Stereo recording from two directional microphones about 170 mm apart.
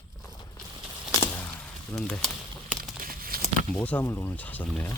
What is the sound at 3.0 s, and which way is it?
Crumpling, 60° right (ahead or behind).